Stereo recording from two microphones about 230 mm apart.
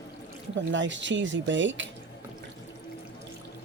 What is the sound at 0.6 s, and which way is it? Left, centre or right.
Speech, right.